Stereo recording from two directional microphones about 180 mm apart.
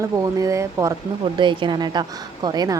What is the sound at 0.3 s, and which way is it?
Speech, 20° right (ahead or behind).